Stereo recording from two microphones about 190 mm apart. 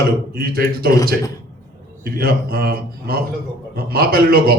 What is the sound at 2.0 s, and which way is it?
A man's voice, 50° right (ahead or behind).